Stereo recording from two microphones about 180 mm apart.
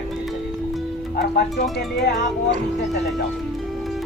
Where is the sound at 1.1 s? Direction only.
60° left (ahead or behind).